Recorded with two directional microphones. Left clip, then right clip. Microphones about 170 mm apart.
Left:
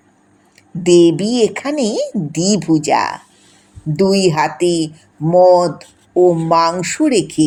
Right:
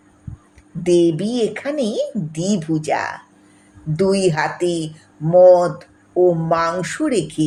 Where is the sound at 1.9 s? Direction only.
30° left (ahead or behind).